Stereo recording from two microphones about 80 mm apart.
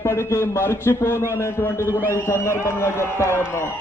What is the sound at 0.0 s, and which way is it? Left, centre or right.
A man's voice, left.